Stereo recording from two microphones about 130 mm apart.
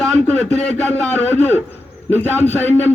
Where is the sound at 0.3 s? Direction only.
55° left (ahead or behind).